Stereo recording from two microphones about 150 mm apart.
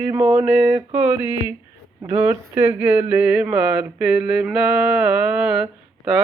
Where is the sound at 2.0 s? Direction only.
20° right (ahead or behind).